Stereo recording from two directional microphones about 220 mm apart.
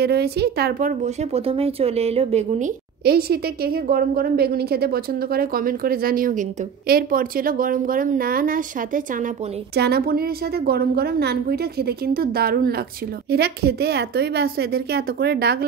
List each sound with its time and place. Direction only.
0.0 s a woman's voice: 45° right (ahead or behind); by 2.7 s 30° right (ahead or behind)
3.0 s a woman's voice: 45° right (ahead or behind)